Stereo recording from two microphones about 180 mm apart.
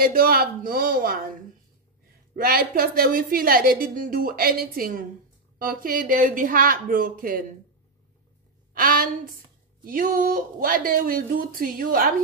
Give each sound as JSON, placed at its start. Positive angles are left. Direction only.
{"t": 0.0, "sound": "a woman's voice", "side_deg": -55}
{"t": 2.3, "sound": "a woman's voice", "side_deg": -55}
{"t": 8.7, "sound": "a woman's voice", "side_deg": -50}